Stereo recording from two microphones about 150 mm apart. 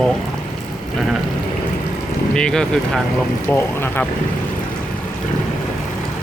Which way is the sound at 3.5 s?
15° left (ahead or behind).